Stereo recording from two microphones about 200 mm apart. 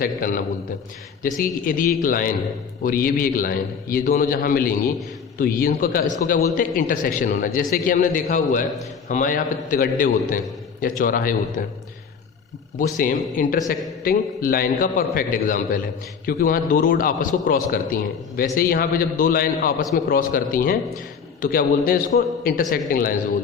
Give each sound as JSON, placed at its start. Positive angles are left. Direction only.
{"t": 0.0, "sound": "a man's voice", "side_deg": 45}
{"t": 13.0, "sound": "a man's voice", "side_deg": 45}